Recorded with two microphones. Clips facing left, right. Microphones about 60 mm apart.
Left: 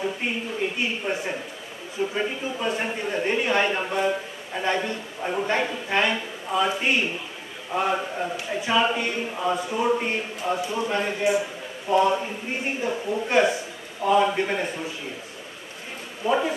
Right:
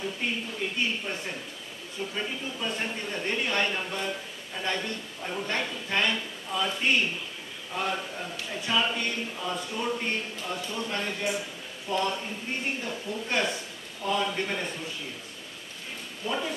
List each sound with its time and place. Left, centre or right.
0.0 s a sound: centre
1.0 s a man's voice: centre
8.5 s a man's voice: centre
16.3 s a man's voice: centre